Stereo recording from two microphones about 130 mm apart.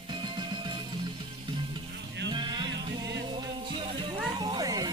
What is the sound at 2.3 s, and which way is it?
Music, 35° right (ahead or behind).